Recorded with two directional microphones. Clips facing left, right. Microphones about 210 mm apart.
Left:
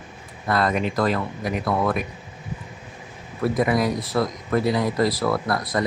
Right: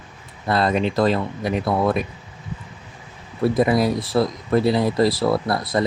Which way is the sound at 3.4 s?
30° right (ahead or behind).